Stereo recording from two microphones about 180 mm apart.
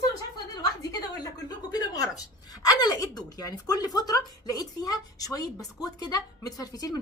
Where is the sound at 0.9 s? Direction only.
20° left (ahead or behind).